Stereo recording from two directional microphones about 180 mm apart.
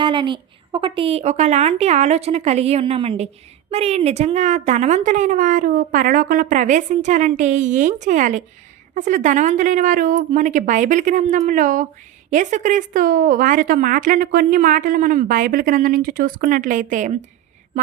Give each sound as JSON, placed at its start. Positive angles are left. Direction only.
{"t": 0.0, "sound": "a woman's voice", "side_deg": -25}